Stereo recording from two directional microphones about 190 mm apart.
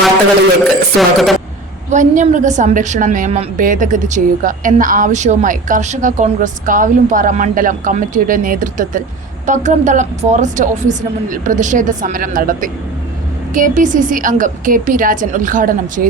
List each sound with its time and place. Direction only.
0.9 s a woman's voice: centre (ahead or behind)
1.9 s a woman's voice: 40° right (ahead or behind)